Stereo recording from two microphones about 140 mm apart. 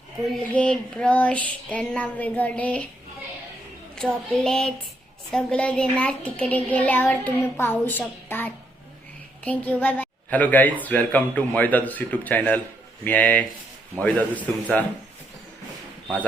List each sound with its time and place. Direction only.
0.5 s a woman's voice: 5° left (ahead or behind)
3.9 s a sound: 5° left (ahead or behind)
5.3 s a woman's voice: 10° left (ahead or behind)